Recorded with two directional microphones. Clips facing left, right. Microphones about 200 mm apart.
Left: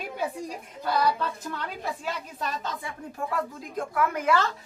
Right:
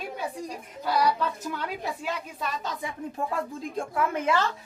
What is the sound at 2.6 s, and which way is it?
A child's voice, 15° right (ahead or behind).